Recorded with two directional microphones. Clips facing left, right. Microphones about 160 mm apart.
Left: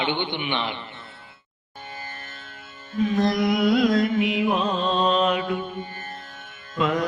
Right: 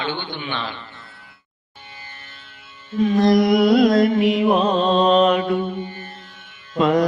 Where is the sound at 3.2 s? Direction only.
40° right (ahead or behind).